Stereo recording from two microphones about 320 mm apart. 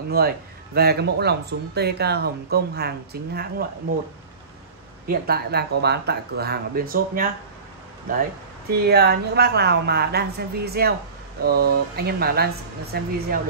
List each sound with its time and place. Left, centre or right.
0.2 s speech: right
5.0 s speech: right